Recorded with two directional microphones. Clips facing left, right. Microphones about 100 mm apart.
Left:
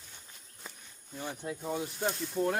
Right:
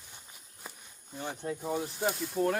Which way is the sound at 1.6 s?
10° right (ahead or behind).